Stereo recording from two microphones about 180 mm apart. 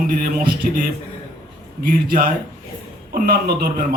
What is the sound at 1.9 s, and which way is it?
A man's voice, 55° right (ahead or behind).